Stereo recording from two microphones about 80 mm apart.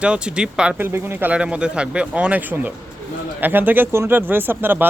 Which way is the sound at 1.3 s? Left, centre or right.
Centre.